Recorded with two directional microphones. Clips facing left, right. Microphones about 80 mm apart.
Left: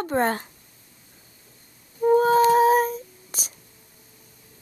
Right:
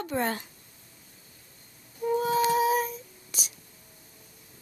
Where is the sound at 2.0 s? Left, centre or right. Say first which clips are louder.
Left 8 dB; left.